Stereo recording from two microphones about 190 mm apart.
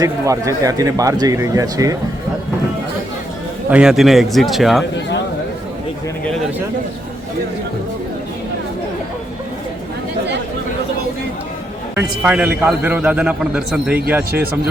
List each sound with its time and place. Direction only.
0.0 s a man's voice: 15° right (ahead or behind)
3.7 s speech: 5° right (ahead or behind)
11.9 s a man's voice: 10° right (ahead or behind)